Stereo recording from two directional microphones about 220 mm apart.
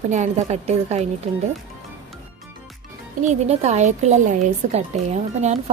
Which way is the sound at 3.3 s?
30° right (ahead or behind).